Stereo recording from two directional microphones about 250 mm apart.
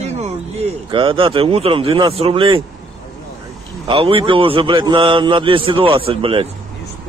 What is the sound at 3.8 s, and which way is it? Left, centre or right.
A man's voice, right.